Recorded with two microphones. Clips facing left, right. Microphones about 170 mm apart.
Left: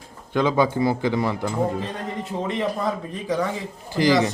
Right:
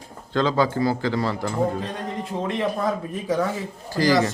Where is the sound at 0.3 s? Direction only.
15° left (ahead or behind).